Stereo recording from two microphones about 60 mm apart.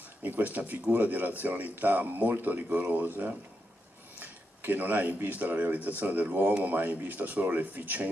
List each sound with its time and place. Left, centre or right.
0.2 s speech: right